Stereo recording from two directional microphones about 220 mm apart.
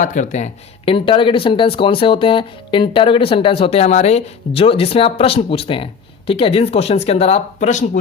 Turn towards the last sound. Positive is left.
turn(degrees=35)  # may be behind; listen again after turning